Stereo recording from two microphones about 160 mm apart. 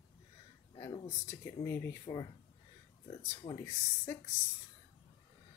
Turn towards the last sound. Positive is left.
turn(degrees=15)  # may be behind; listen again after turning